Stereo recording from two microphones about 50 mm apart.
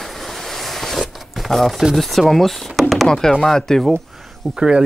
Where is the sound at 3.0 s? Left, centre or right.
Centre.